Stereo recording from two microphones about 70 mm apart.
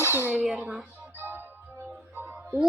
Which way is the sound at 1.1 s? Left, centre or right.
Right.